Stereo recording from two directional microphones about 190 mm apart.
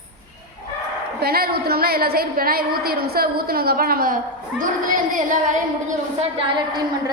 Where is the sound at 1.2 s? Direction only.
55° right (ahead or behind).